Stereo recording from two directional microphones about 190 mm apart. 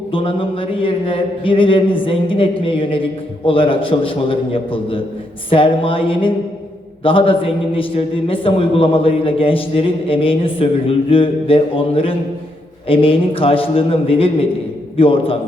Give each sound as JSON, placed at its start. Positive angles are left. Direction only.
{"t": 0.1, "sound": "a man's voice", "side_deg": 30}